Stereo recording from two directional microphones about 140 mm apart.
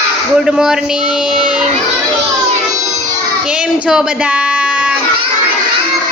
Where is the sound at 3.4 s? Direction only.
5° right (ahead or behind).